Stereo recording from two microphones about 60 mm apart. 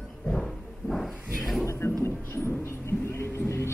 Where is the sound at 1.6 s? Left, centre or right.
Left.